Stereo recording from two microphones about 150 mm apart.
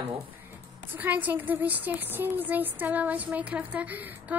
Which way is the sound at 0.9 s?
10° right (ahead or behind).